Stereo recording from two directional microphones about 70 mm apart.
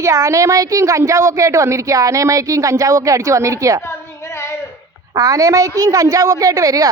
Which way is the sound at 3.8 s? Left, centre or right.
Left.